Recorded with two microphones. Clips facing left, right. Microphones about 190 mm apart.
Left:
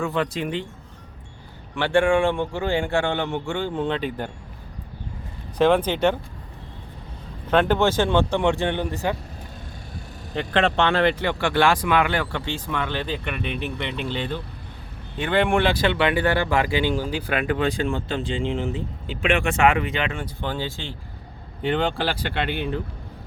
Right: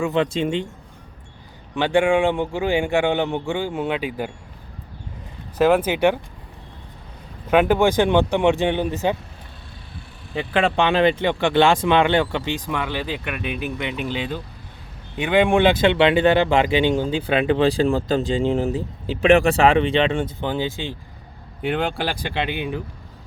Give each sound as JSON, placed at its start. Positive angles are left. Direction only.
{"t": 0.0, "sound": "speech", "side_deg": -20}
{"t": 1.7, "sound": "speech", "side_deg": -15}
{"t": 5.5, "sound": "speech", "side_deg": -5}
{"t": 7.4, "sound": "speech", "side_deg": -10}
{"t": 10.3, "sound": "speech", "side_deg": -10}
{"t": 20.4, "sound": "speech", "side_deg": -20}